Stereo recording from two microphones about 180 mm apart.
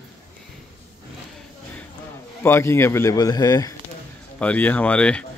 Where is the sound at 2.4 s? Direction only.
15° left (ahead or behind).